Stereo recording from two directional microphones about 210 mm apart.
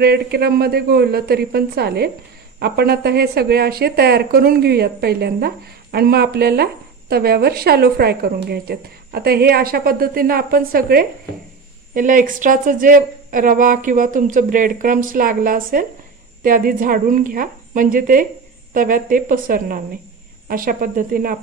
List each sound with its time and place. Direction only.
0.0 s speech: 50° right (ahead or behind)